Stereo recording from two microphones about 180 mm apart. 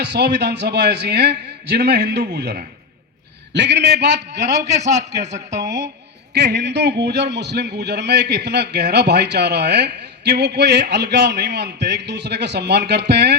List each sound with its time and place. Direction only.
0.0 s a man's voice: 70° right (ahead or behind)
5.5 s speech: 15° right (ahead or behind)
6.3 s a man's voice: 70° right (ahead or behind)